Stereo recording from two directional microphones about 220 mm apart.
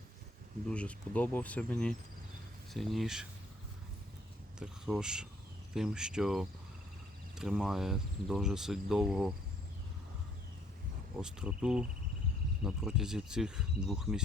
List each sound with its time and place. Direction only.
0.7 s speech: 5° left (ahead or behind)
4.6 s speech: 5° right (ahead or behind)
11.2 s speech: 5° right (ahead or behind)